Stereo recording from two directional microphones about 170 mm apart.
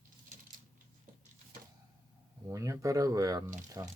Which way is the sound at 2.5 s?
20° right (ahead or behind).